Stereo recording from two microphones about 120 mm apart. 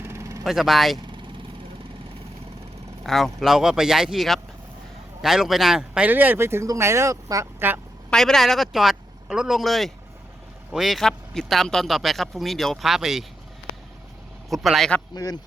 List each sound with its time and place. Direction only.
0.0 s vehicle: 20° right (ahead or behind)
0.4 s a man's voice: centre (ahead or behind)
3.0 s a man's voice: centre (ahead or behind); by 7.7 s 25° right (ahead or behind)
8.1 s a man's voice: 5° left (ahead or behind)
14.5 s a man's voice: centre (ahead or behind)
15.1 s a man's voice: 35° left (ahead or behind)